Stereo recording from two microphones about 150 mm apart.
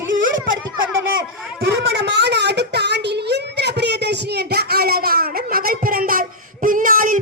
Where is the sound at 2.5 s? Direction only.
90° right.